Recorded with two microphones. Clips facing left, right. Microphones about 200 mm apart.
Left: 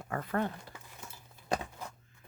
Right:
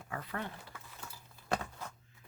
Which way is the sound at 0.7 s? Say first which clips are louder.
Left 1 dB; 20° left (ahead or behind).